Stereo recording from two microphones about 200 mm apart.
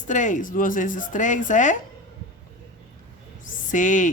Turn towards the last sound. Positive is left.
turn(degrees=40)  # may be behind; listen again after turning